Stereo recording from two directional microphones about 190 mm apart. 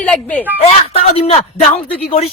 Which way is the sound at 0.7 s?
35° left (ahead or behind).